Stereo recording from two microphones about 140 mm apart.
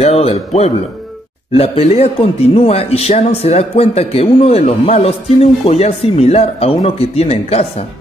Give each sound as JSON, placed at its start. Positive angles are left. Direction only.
{"t": 0.0, "sound": "a man's voice", "side_deg": 45}